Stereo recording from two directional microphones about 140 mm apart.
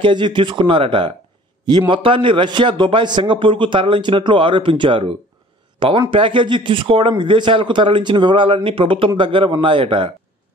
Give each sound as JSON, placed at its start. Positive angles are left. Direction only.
{"t": 0.0, "sound": "speech", "side_deg": -35}